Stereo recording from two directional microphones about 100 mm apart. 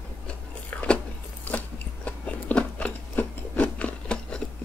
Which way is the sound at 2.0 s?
15° left (ahead or behind).